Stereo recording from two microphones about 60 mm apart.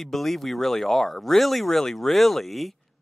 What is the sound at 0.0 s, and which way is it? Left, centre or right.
Speech, centre.